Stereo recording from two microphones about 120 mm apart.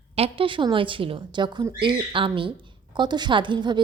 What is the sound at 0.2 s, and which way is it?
A woman's voice, 45° right (ahead or behind).